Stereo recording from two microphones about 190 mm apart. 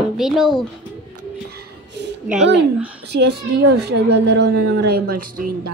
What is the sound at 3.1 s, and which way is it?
A woman's voice, 60° right (ahead or behind).